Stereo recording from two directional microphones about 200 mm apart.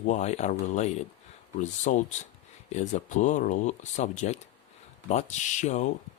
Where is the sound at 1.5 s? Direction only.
35° left (ahead or behind).